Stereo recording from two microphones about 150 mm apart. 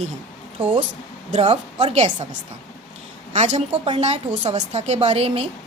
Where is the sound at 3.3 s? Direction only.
50° right (ahead or behind).